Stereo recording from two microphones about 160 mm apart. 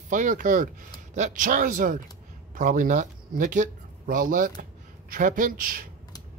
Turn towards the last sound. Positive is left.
turn(degrees=-60)  # may be behind; listen again after turning